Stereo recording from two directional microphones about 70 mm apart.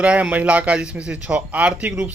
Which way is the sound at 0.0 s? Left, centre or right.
Centre.